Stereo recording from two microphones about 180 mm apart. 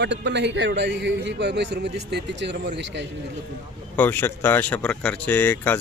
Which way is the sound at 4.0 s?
10° left (ahead or behind).